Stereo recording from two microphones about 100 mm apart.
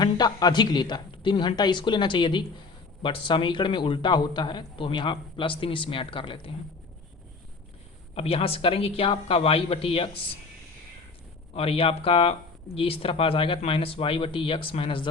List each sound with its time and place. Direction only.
0.0 s a man's voice: 45° left (ahead or behind)
8.1 s speech: 75° left (ahead or behind)
11.5 s a man's voice: 75° left (ahead or behind)